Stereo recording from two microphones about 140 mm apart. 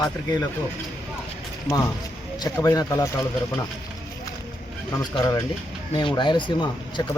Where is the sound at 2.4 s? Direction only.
30° left (ahead or behind).